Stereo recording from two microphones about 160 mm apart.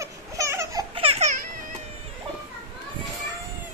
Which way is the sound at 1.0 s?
40° right (ahead or behind).